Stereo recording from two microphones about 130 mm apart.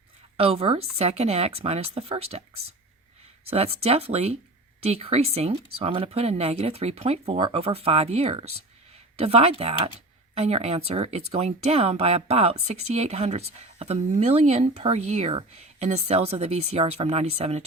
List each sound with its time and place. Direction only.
0.3 s speech: 50° right (ahead or behind)
3.5 s speech: 50° right (ahead or behind)